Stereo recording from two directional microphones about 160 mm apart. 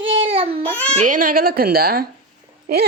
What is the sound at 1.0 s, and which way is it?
A woman's voice, 60° right (ahead or behind).